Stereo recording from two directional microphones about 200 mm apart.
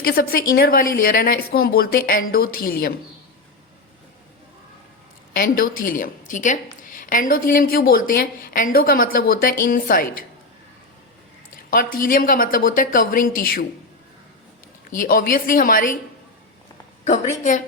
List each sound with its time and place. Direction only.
0.0 s a woman's voice: 50° left (ahead or behind)
5.3 s a woman's voice: 45° left (ahead or behind)
11.7 s a woman's voice: 45° left (ahead or behind)
14.8 s a woman's voice: 45° left (ahead or behind)
17.0 s a woman's voice: 40° left (ahead or behind)